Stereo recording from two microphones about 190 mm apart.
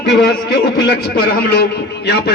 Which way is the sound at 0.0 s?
65° left (ahead or behind).